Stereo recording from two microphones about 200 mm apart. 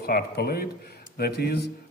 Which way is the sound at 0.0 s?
50° left (ahead or behind).